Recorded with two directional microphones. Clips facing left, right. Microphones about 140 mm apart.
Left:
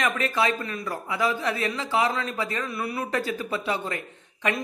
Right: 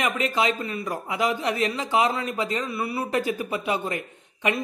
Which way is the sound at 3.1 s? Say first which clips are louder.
Right 3 dB; 15° right (ahead or behind).